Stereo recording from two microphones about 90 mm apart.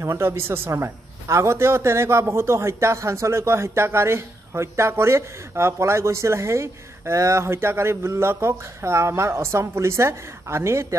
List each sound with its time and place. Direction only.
0.0 s a man's voice: 30° right (ahead or behind)